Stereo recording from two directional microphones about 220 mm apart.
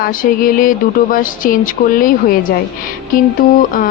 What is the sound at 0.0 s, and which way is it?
Speech, 40° left (ahead or behind).